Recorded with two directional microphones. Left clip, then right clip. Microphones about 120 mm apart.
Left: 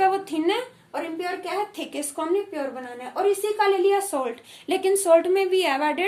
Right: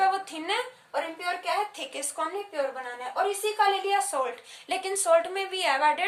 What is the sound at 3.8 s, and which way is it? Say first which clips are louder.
A woman's voice: left 4 dB; 55° left (ahead or behind).